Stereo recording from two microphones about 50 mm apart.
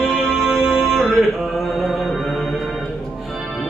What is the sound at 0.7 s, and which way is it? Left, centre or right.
Music, centre.